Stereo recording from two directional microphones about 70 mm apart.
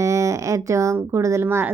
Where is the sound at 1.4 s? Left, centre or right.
Right.